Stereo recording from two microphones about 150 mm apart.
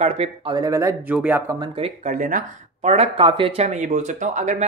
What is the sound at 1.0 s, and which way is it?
Speech, 10° right (ahead or behind).